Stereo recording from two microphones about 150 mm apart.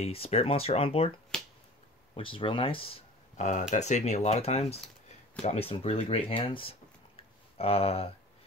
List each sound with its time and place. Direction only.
0.0 s speech: 40° left (ahead or behind)
1.3 s finger snapping: 5° left (ahead or behind)
2.1 s speech: 35° left (ahead or behind)
3.3 s speech: 55° left (ahead or behind)